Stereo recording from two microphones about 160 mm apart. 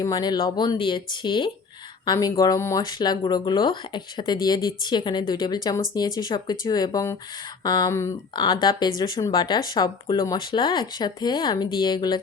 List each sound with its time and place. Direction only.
0.0 s speech: 25° left (ahead or behind)